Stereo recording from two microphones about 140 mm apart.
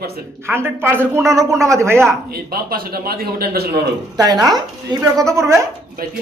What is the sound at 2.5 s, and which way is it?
A man's voice, 90° right.